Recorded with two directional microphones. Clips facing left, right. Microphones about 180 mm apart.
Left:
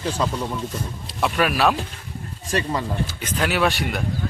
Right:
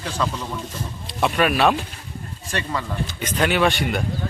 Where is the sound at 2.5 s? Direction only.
35° left (ahead or behind).